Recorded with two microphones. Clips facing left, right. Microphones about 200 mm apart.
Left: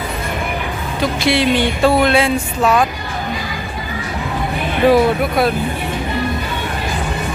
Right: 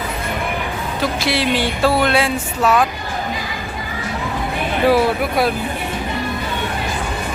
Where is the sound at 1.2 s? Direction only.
Centre (ahead or behind).